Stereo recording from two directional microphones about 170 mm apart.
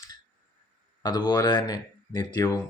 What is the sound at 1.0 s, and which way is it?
Speech, 25° left (ahead or behind).